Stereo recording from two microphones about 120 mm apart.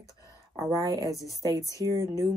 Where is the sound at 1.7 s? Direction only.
25° left (ahead or behind).